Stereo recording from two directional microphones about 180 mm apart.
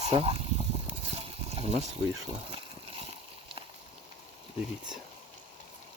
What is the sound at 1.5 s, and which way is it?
Speech, 35° right (ahead or behind).